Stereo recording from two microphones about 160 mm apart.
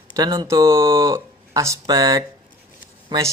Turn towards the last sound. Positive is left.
turn(degrees=-25)  # may be behind; listen again after turning